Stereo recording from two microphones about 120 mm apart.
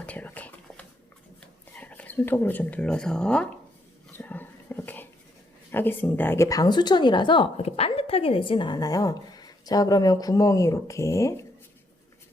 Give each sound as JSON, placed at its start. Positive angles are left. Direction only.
{"t": 0.0, "sound": "a sound", "side_deg": 15}
{"t": 1.4, "sound": "speech", "side_deg": 15}
{"t": 4.2, "sound": "dog", "side_deg": 15}
{"t": 5.7, "sound": "speech", "side_deg": 15}
{"t": 7.5, "sound": "speech", "side_deg": 60}